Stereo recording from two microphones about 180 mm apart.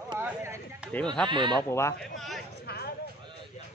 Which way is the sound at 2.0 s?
Centre (ahead or behind).